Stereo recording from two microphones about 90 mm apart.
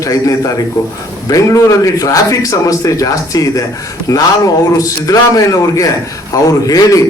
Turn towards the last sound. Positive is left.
turn(degrees=40)  # may be behind; listen again after turning